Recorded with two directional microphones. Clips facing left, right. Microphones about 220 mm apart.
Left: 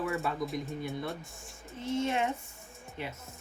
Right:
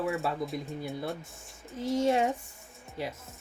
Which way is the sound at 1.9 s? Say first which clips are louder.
Right 4 dB; 40° right (ahead or behind).